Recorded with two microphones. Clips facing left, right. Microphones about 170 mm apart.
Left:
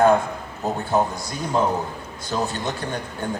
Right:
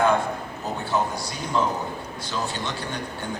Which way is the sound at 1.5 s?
45° left (ahead or behind).